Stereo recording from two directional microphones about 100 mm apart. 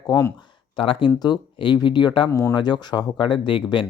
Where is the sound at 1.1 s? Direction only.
45° left (ahead or behind).